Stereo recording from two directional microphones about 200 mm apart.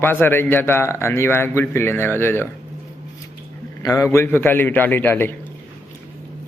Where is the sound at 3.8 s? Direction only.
15° left (ahead or behind).